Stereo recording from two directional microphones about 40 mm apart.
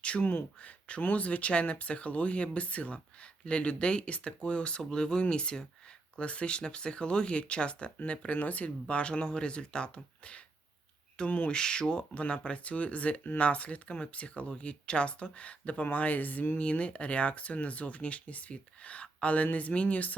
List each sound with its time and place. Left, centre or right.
0.0 s a sound: left
0.6 s speech: left
8.4 s speech: left
16.6 s speech: left